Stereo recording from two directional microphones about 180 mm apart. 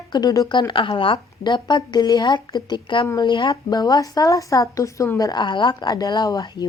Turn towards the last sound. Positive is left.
turn(degrees=20)  # may be behind; listen again after turning